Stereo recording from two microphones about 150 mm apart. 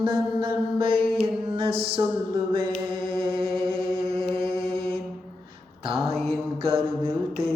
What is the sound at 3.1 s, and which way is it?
Chant, 35° right (ahead or behind).